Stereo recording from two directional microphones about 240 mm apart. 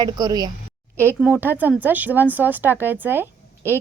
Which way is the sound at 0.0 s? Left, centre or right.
Centre.